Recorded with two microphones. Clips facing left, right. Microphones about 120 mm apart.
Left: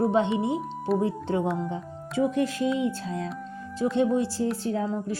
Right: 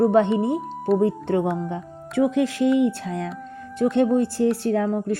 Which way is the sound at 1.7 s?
70° right (ahead or behind).